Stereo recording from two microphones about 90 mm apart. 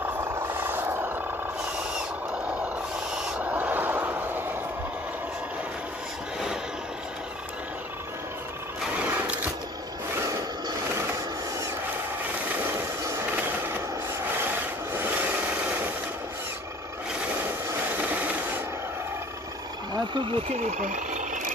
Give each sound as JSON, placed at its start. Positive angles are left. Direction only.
{"t": 0.0, "sound": "vehicle", "side_deg": -30}
{"t": 3.2, "sound": "owl", "side_deg": -5}
{"t": 3.4, "sound": "train", "side_deg": -20}
{"t": 8.9, "sound": "a sound", "side_deg": -20}
{"t": 12.5, "sound": "vehicle", "side_deg": -25}
{"t": 14.4, "sound": "rub", "side_deg": -25}
{"t": 18.0, "sound": "printer", "side_deg": -15}
{"t": 19.9, "sound": "a sound", "side_deg": -70}